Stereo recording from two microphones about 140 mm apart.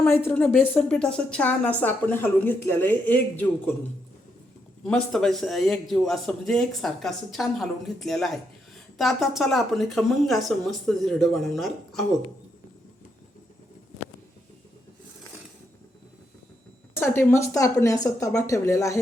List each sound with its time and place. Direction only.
0.0 s a woman's voice: 10° left (ahead or behind)
4.8 s speech: 5° left (ahead or behind)
17.0 s a woman's voice: 15° left (ahead or behind)